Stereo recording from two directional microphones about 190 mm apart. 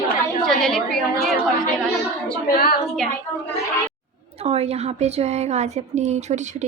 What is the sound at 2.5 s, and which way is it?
Speech, 55° left (ahead or behind).